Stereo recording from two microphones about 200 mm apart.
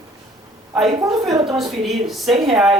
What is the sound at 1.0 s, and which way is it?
Speech, 20° right (ahead or behind).